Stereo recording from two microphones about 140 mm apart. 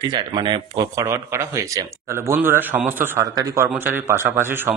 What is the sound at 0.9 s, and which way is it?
Speech, 20° right (ahead or behind).